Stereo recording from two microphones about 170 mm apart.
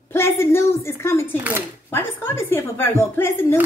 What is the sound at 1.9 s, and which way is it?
Speech, 15° left (ahead or behind).